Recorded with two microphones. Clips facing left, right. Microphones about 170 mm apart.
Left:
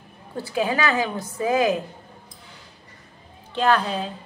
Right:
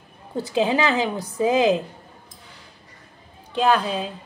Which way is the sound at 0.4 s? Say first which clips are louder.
Right 3 dB; 20° right (ahead or behind).